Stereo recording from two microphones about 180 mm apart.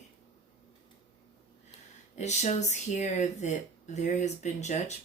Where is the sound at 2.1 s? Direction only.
40° left (ahead or behind).